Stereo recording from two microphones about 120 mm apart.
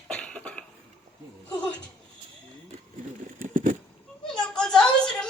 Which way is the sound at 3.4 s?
90° right.